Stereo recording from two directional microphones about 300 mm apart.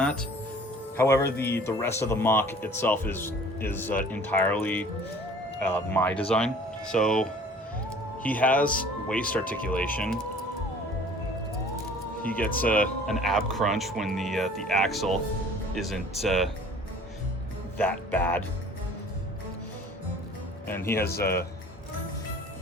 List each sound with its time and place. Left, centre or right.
0.0 s speech: centre
9.4 s speech: left
9.6 s speech: centre
12.4 s speech: left
12.6 s speech: centre
17.7 s speech: centre
20.7 s speech: centre
21.0 s speech: left